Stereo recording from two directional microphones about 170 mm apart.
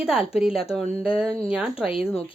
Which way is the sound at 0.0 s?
5° right (ahead or behind).